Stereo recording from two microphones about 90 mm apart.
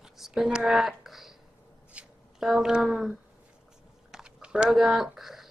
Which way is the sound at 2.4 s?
5° right (ahead or behind).